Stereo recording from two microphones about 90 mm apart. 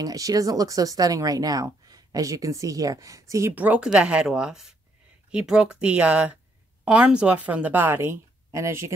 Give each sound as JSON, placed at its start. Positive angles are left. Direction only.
{"t": 0.0, "sound": "speech", "side_deg": -40}
{"t": 3.5, "sound": "a woman's voice", "side_deg": -15}